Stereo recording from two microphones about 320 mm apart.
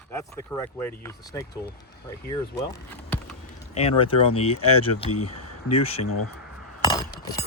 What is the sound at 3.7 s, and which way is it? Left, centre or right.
Speech, centre.